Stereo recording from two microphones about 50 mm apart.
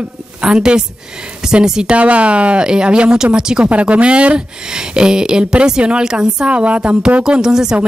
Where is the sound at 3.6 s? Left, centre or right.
Right.